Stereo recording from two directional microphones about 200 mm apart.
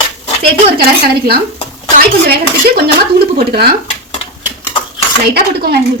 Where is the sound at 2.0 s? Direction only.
50° right (ahead or behind).